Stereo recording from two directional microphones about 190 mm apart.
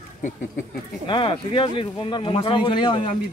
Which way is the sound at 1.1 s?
25° left (ahead or behind).